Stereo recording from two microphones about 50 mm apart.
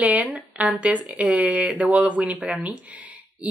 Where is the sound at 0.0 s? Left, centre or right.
Right.